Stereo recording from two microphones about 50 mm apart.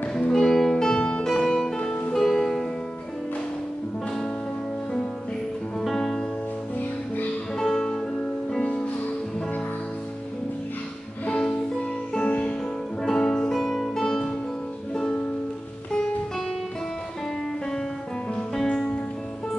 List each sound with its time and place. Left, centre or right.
0.1 s music: centre
5.8 s music: centre
7.5 s music: centre
12.3 s music: left
13.0 s music: centre
18.5 s music: centre